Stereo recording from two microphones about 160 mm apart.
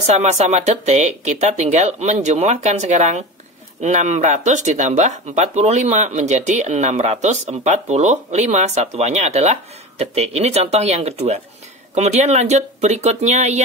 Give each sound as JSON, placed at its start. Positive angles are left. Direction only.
{"t": 0.0, "sound": "speech", "side_deg": -45}